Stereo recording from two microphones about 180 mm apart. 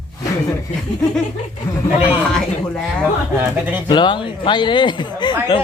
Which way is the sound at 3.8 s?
25° left (ahead or behind).